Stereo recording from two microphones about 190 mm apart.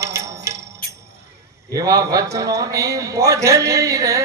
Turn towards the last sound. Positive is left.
turn(degrees=-15)  # may be behind; listen again after turning